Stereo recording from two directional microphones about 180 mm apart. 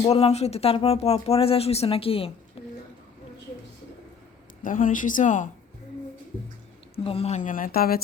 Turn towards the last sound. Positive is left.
turn(degrees=55)  # may be behind; listen again after turning